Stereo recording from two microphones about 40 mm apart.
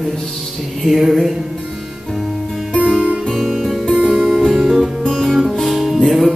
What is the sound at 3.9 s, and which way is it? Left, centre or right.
Music, right.